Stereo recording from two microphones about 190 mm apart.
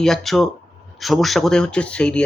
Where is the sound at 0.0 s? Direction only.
Centre (ahead or behind).